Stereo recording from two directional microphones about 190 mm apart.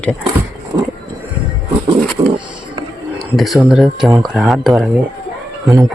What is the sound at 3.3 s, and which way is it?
Speech, centre (ahead or behind).